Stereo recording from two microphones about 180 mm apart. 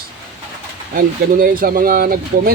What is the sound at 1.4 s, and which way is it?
Speech, 55° right (ahead or behind).